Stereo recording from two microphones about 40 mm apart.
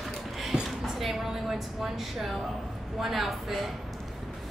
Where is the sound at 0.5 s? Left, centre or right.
Right.